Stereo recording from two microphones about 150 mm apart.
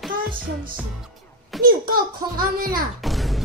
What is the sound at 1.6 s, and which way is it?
A child's voice, 75° right (ahead or behind).